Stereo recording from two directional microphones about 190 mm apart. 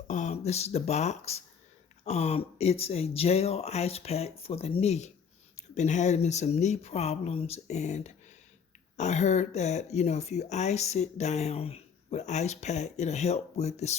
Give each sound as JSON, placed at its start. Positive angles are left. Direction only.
{"t": 0.1, "sound": "speech", "side_deg": 40}